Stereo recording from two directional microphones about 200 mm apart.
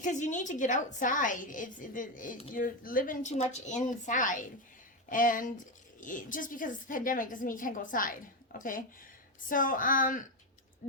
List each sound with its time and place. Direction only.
0.0 s a woman's voice: 40° left (ahead or behind)